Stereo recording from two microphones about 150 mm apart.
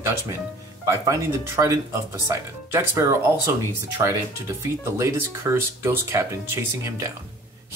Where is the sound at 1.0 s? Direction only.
20° right (ahead or behind).